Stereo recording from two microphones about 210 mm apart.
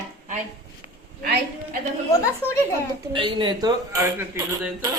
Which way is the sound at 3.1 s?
25° right (ahead or behind).